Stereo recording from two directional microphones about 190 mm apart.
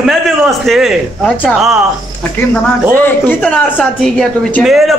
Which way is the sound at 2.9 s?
10° left (ahead or behind).